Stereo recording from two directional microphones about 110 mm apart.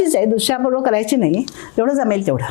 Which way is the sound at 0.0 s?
25° left (ahead or behind).